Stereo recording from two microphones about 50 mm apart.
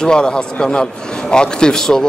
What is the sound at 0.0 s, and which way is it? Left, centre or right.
A man's voice, centre.